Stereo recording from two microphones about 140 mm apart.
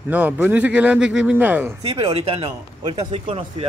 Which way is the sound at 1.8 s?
40° right (ahead or behind).